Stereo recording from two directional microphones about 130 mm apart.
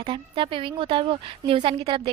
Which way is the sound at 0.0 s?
40° right (ahead or behind).